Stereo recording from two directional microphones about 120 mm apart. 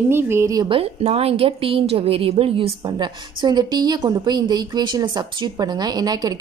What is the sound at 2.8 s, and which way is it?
A woman's voice, 35° right (ahead or behind).